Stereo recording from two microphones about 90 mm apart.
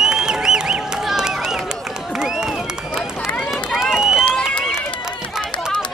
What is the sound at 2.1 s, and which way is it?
Run, 5° right (ahead or behind).